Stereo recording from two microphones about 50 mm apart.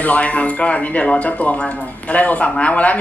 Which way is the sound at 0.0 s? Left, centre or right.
Left.